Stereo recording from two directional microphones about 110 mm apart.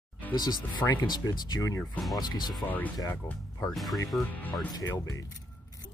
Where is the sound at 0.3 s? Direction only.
40° left (ahead or behind).